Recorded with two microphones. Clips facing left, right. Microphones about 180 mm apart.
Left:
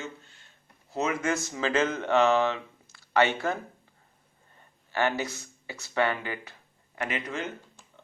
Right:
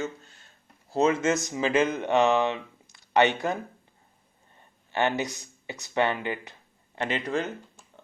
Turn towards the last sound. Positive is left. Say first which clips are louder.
# right 4 dB
turn(degrees=-30)  # may be behind; listen again after turning